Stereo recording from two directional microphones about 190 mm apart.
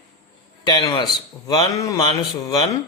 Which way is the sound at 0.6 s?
25° left (ahead or behind).